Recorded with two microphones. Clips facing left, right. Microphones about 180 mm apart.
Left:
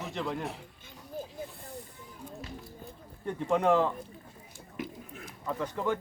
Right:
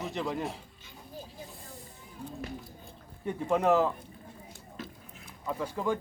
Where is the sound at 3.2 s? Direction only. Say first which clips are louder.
Even; 5° right (ahead or behind).